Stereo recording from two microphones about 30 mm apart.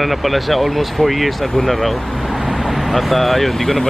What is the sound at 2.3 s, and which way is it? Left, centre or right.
Vehicle, centre.